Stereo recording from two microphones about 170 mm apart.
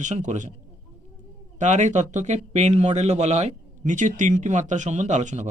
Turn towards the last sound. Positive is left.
turn(degrees=-45)  # may be behind; listen again after turning